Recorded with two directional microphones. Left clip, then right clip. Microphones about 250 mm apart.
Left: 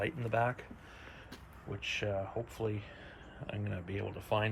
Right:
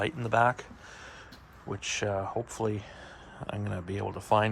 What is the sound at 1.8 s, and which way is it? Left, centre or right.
Speech, right.